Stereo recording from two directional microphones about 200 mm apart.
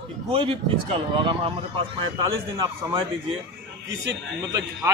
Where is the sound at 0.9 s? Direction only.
25° right (ahead or behind).